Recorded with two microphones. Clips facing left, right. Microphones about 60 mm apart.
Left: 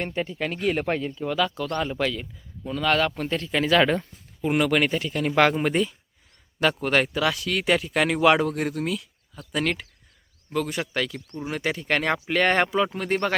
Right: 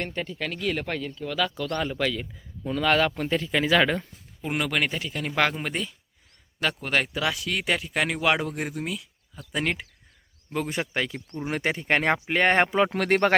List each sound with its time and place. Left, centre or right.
0.0 s speech: centre
1.4 s speech: centre
2.6 s speech: centre
10.5 s speech: right
12.9 s speech: right